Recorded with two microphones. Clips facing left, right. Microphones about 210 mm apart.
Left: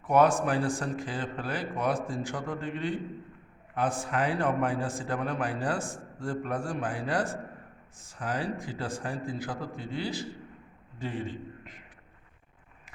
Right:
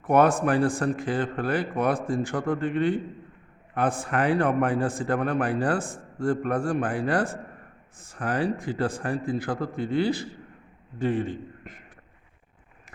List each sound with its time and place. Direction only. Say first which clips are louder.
0.0 s a man's voice: right 3 dB; 55° right (ahead or behind)